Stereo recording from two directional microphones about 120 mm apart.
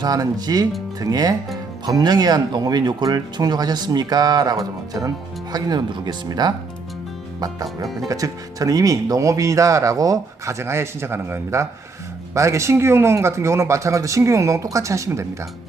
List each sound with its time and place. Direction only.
0.0 s speech: 35° right (ahead or behind)